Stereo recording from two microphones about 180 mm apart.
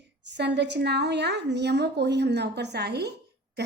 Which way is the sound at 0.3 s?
70° right (ahead or behind).